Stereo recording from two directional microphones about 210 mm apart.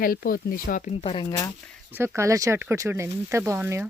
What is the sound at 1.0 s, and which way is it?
Speech, 20° left (ahead or behind).